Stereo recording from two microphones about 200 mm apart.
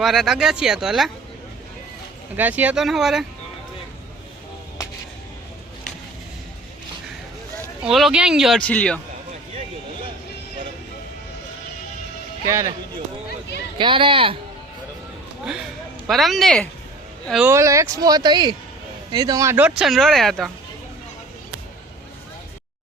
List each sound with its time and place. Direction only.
0.0 s speech: centre (ahead or behind)
2.3 s speech: 10° right (ahead or behind)
7.8 s speech: centre (ahead or behind)
12.5 s speech: 15° right (ahead or behind)
13.7 s speech: 25° right (ahead or behind)
16.0 s speech: centre (ahead or behind)
17.5 s speech: 15° right (ahead or behind); by 20.5 s centre (ahead or behind)